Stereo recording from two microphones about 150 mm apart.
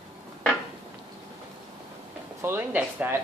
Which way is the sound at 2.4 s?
15° right (ahead or behind).